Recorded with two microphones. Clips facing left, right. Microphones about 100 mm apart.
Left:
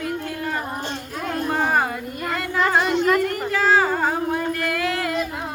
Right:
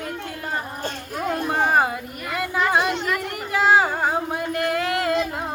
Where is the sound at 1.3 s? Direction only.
15° right (ahead or behind).